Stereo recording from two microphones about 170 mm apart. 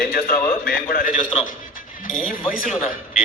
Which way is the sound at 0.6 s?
60° left (ahead or behind).